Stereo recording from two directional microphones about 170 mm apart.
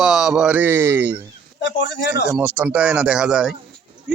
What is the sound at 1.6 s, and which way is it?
Speech, 90° left.